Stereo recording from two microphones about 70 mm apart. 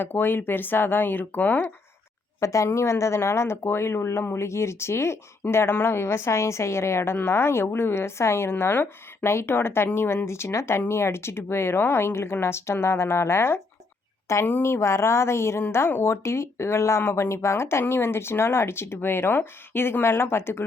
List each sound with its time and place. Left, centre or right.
0.0 s speech: left
2.4 s a woman's voice: left